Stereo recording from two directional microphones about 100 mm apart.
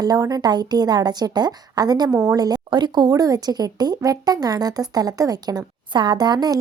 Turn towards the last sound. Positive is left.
turn(degrees=-45)  # may be behind; listen again after turning